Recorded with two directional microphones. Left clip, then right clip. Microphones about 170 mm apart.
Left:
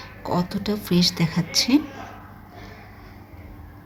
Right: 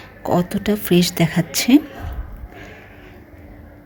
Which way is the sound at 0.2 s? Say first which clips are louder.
Right 6 dB; 15° right (ahead or behind).